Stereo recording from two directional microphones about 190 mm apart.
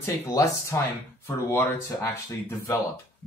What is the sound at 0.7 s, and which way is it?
Speech, 15° left (ahead or behind).